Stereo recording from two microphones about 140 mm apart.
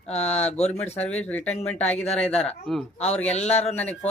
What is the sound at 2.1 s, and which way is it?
Speech, 50° left (ahead or behind).